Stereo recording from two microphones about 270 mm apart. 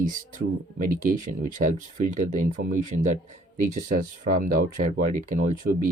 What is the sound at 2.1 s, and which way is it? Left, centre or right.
Speech, right.